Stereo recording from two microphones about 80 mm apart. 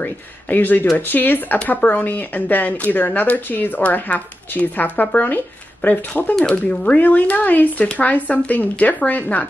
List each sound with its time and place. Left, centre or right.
0.0 s speech: left